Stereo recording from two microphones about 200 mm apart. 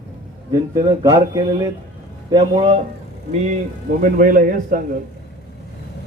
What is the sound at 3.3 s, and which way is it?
A man's voice, 35° right (ahead or behind).